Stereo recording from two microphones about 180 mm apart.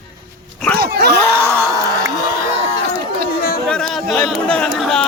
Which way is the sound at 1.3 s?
15° right (ahead or behind).